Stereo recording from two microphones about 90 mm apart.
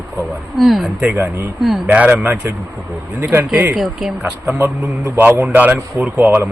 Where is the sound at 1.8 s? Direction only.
15° right (ahead or behind).